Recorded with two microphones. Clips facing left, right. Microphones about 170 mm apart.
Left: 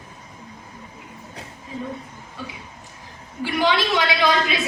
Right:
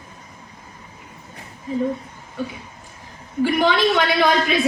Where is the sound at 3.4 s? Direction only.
50° right (ahead or behind).